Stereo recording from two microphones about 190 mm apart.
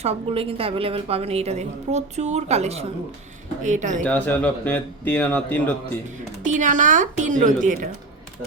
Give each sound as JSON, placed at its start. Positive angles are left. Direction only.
{"t": 0.0, "sound": "a woman's voice", "side_deg": -30}
{"t": 4.0, "sound": "a man's voice", "side_deg": 10}
{"t": 5.8, "sound": "a woman's voice", "side_deg": -40}